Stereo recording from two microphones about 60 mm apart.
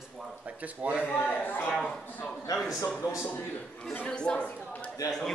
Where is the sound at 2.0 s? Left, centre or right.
Left.